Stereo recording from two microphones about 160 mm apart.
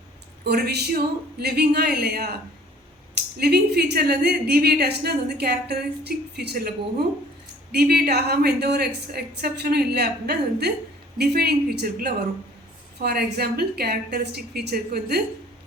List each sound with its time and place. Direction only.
0.4 s a woman's voice: 90° right
7.7 s a woman's voice: 80° right
13.0 s a woman's voice: 80° right